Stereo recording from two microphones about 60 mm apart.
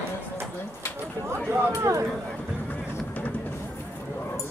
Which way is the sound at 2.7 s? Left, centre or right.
Left.